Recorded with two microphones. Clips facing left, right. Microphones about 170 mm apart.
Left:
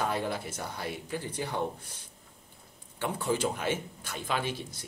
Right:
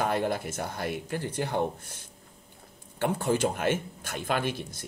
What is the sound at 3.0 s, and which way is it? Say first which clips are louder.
Speech: right 4 dB; 50° right (ahead or behind).